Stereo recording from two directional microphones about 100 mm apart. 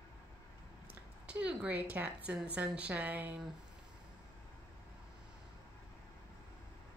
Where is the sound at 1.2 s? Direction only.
15° right (ahead or behind).